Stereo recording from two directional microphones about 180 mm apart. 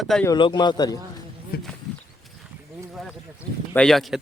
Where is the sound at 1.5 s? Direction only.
55° left (ahead or behind).